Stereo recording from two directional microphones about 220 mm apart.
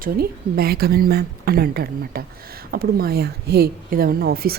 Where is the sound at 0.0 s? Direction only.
45° right (ahead or behind).